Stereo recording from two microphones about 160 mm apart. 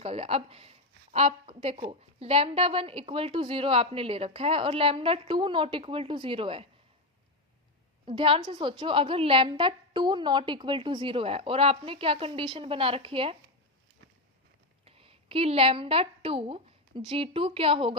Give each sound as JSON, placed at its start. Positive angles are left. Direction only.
{"t": 0.0, "sound": "speech", "side_deg": -35}
{"t": 8.0, "sound": "speech", "side_deg": -30}
{"t": 14.8, "sound": "a woman's voice", "side_deg": -35}